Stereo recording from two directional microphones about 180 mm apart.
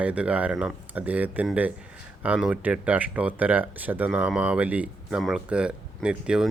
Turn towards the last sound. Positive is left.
turn(degrees=-5)  # may be behind; listen again after turning